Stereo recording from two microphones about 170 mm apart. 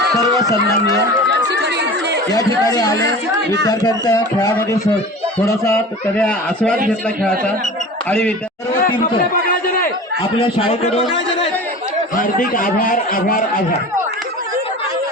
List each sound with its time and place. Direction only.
1.3 s chatter: 80° right
2.3 s a man's voice: 20° left (ahead or behind)
3.0 s speech: 90° right
3.7 s a man's voice: 20° left (ahead or behind)
5.6 s speech: 10° left (ahead or behind)
9.5 s chatter: 55° left (ahead or behind)
10.3 s a man's voice: 35° left (ahead or behind)
12.1 s a man's voice: 55° left (ahead or behind)